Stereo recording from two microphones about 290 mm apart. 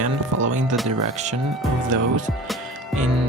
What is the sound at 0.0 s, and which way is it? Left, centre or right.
Music, right.